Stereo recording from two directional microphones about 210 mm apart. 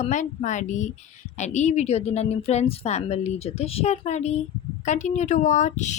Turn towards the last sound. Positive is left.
turn(degrees=35)  # may be behind; listen again after turning